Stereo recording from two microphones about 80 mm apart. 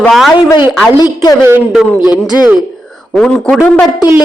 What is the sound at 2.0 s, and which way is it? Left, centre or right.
Speech, left.